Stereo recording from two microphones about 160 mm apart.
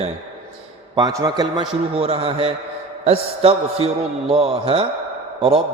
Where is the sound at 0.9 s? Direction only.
25° right (ahead or behind).